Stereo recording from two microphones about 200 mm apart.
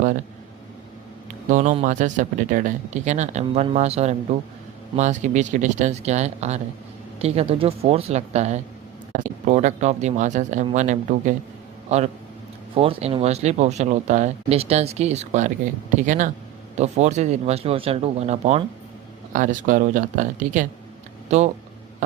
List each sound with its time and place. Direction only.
1.5 s a man's voice: 40° right (ahead or behind)